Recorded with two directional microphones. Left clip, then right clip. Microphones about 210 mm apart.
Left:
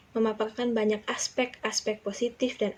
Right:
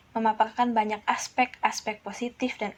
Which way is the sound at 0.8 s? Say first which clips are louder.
Right 1 dB; 25° right (ahead or behind).